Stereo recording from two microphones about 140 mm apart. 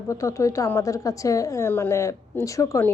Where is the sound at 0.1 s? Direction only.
20° left (ahead or behind).